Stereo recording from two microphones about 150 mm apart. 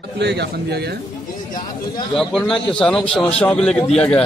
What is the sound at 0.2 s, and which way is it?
Speech, 90° right.